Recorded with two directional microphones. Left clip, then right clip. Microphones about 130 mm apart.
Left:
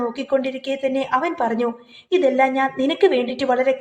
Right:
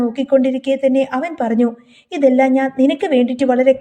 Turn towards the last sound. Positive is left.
turn(degrees=-50)  # may be behind; listen again after turning